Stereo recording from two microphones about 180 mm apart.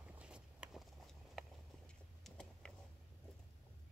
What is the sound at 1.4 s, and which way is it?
Clip-clop, centre (ahead or behind).